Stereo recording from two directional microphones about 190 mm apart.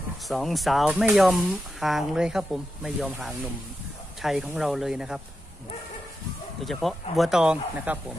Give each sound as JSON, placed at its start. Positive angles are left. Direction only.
{"t": 0.3, "sound": "speech", "side_deg": 0}
{"t": 6.6, "sound": "speech", "side_deg": 0}